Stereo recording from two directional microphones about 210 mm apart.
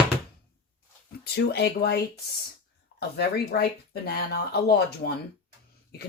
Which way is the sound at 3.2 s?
50° left (ahead or behind).